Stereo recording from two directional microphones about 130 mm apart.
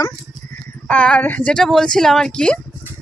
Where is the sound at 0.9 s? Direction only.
10° left (ahead or behind).